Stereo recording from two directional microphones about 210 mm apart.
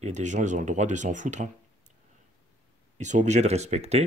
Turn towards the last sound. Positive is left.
turn(degrees=-30)  # may be behind; listen again after turning